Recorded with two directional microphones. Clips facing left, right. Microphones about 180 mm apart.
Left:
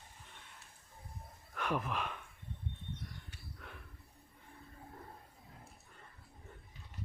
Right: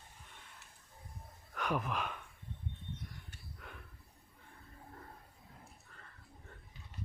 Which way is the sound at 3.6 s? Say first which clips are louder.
Even; centre (ahead or behind).